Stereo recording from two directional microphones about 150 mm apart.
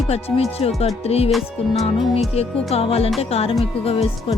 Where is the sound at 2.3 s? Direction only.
40° left (ahead or behind).